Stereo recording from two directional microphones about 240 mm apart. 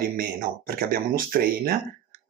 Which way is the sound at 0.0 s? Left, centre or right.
Right.